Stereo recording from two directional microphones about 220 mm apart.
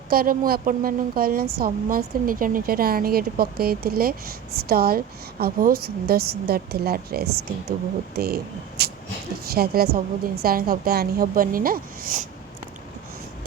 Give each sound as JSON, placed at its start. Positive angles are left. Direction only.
{"t": 0.1, "sound": "a woman's voice", "side_deg": -40}